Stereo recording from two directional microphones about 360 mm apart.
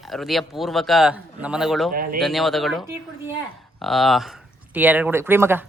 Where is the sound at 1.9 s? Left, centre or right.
Right.